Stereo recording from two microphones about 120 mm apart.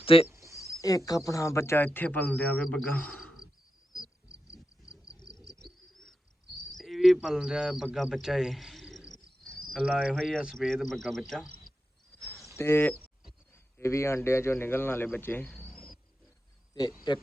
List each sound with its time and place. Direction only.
0.0 s speech: 50° left (ahead or behind)
0.3 s a sound: 25° right (ahead or behind)
0.8 s speech: 30° left (ahead or behind); by 2.8 s 10° left (ahead or behind)
3.9 s a sound: 5° right (ahead or behind)
4.4 s insect: 25° left (ahead or behind)
5.2 s bird: 30° left (ahead or behind)
5.9 s bird: centre (ahead or behind)
9.7 s speech: 5° left (ahead or behind)
11.7 s cricket: 40° left (ahead or behind)
12.5 s speech: 20° left (ahead or behind)
15.5 s a sound: centre (ahead or behind)
17.1 s speech: 40° left (ahead or behind)